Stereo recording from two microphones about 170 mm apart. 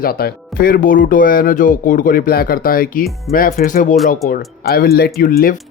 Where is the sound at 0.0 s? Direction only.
60° left (ahead or behind).